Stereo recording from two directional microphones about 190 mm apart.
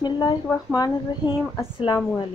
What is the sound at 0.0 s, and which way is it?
Speech, 20° left (ahead or behind).